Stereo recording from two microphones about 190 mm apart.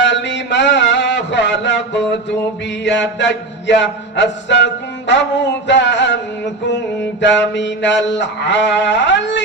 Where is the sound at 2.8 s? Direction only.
70° left (ahead or behind).